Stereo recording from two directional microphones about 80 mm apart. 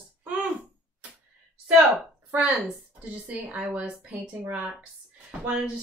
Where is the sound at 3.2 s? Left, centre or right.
Centre.